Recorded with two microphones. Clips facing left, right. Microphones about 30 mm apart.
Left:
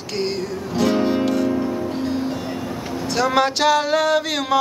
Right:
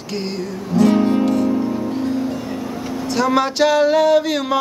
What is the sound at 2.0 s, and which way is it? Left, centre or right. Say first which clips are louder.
Music: right 2 dB; left.